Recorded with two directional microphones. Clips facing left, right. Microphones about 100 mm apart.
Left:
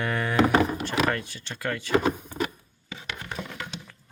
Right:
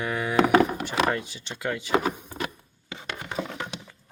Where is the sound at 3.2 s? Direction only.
20° right (ahead or behind).